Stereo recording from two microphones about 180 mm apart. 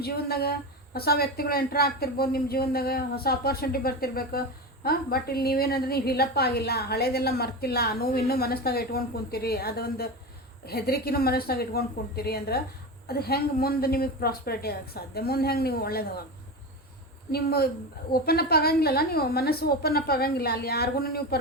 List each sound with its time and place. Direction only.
0.0 s speech: 60° left (ahead or behind)
17.3 s speech: 60° left (ahead or behind)